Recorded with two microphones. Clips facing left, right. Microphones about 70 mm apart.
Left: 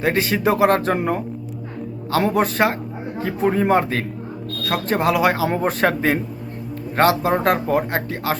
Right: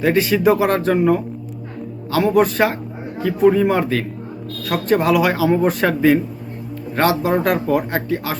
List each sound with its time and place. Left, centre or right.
0.0 s speech: left